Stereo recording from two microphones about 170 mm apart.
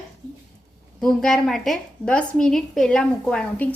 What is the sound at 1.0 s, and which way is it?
A woman's voice, 5° left (ahead or behind).